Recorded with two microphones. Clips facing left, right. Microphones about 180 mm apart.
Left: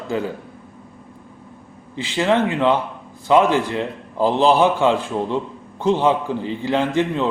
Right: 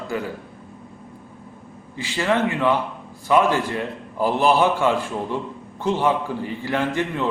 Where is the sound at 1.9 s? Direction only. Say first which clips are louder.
Left 3 dB; 20° left (ahead or behind).